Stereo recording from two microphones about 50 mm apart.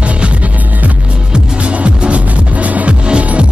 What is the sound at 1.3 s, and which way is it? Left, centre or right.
Music, right.